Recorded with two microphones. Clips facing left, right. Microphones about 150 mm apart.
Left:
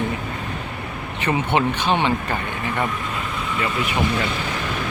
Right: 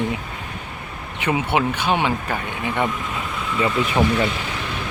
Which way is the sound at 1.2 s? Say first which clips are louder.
Even; 10° right (ahead or behind).